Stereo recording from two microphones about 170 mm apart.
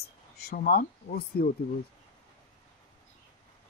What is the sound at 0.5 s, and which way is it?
Speech, 60° left (ahead or behind).